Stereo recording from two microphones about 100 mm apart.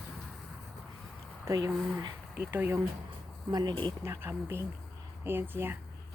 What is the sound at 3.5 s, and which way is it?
Speech, 40° right (ahead or behind).